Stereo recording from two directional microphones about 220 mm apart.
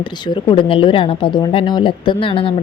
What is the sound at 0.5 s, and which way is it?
A woman's voice, 25° left (ahead or behind).